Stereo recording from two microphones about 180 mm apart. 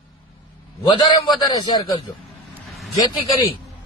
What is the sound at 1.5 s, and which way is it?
Speech, 20° left (ahead or behind).